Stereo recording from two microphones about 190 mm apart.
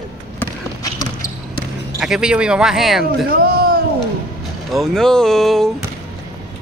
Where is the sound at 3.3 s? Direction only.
50° right (ahead or behind).